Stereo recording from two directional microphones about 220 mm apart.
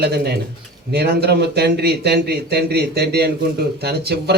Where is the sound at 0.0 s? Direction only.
45° right (ahead or behind).